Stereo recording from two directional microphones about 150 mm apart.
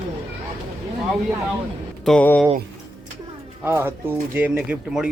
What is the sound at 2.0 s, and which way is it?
Speech, centre (ahead or behind).